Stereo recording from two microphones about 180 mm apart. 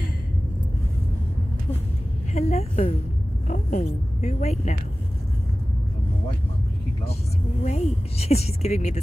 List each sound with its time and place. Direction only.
2.3 s a woman's voice: 35° left (ahead or behind)
7.6 s a woman's voice: 35° left (ahead or behind)